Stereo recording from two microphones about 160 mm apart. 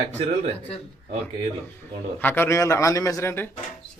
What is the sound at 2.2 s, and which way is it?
A man's voice, 15° left (ahead or behind).